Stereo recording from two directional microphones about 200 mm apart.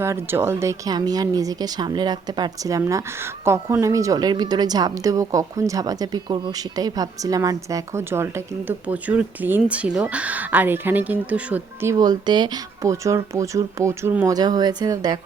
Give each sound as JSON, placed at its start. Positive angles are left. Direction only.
{"t": 0.0, "sound": "speech", "side_deg": -10}